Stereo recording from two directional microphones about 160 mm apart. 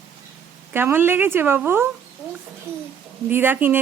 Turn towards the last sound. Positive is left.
turn(degrees=-10)  # may be behind; listen again after turning